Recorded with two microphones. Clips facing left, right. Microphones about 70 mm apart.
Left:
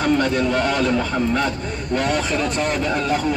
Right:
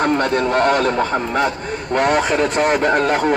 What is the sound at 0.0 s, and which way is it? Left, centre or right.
Speech, right.